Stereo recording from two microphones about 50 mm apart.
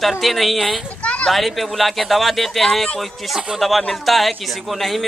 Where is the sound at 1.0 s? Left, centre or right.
Left.